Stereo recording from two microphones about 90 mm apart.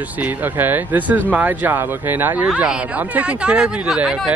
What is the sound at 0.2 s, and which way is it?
Speech, 20° right (ahead or behind).